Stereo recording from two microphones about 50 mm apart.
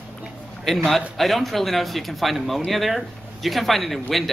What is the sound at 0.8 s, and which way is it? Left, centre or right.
A man's voice, centre.